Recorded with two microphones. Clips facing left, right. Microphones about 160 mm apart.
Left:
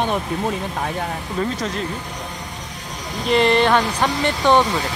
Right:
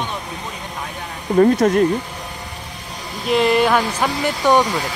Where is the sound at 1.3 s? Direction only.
50° right (ahead or behind).